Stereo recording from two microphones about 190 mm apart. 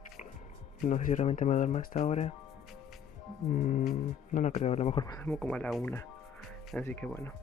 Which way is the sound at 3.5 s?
40° left (ahead or behind).